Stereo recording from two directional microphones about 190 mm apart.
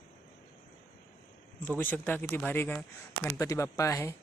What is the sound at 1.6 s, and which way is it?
Speech, 10° left (ahead or behind).